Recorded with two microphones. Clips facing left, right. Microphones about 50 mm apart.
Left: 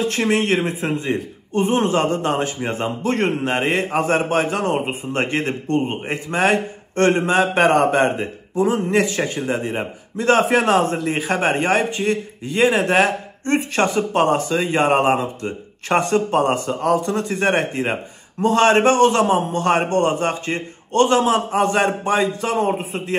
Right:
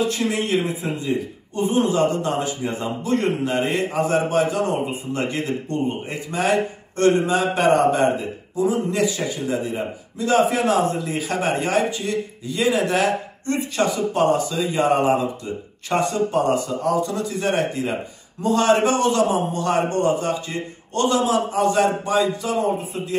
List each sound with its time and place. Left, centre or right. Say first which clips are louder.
0.0 s a man's voice: left 3 dB; left